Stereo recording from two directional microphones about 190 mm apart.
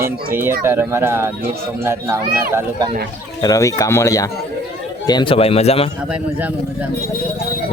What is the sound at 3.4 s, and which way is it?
Speech, 20° left (ahead or behind).